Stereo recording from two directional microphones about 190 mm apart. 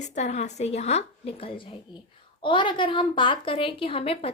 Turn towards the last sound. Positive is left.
turn(degrees=30)  # may be behind; listen again after turning